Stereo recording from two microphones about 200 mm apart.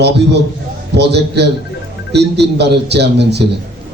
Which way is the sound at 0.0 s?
55° right (ahead or behind).